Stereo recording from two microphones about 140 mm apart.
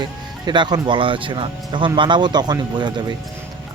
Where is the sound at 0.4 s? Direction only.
30° right (ahead or behind).